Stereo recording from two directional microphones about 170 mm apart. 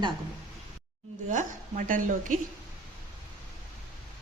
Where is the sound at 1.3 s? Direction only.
50° right (ahead or behind).